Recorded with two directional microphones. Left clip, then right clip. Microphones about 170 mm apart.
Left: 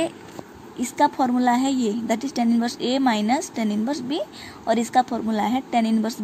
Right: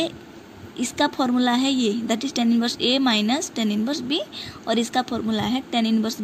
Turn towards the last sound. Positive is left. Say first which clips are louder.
# left 1 dB
turn(degrees=5)  # may be behind; listen again after turning